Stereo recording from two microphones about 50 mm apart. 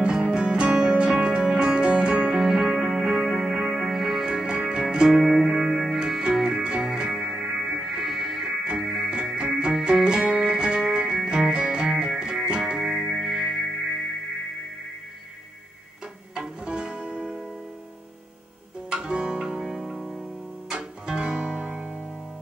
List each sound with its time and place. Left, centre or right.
0.0 s music: centre
2.4 s music: centre
7.8 s music: centre
8.6 s music: centre
12.8 s music: centre
16.3 s music: centre
18.9 s music: centre
20.6 s music: centre